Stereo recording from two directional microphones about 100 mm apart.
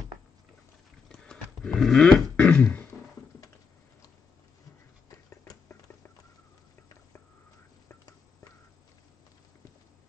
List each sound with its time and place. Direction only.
1.0 s throat clearing: 5° left (ahead or behind)